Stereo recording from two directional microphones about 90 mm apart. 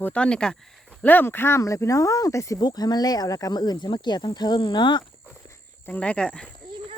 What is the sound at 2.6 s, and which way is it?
Speech, 50° left (ahead or behind).